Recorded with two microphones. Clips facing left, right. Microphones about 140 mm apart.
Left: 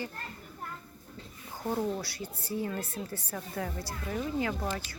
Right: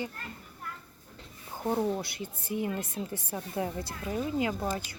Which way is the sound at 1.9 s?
20° right (ahead or behind).